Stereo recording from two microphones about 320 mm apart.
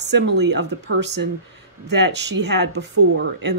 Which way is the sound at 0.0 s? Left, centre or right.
Right.